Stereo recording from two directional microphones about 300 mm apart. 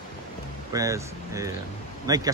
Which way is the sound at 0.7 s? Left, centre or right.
Centre.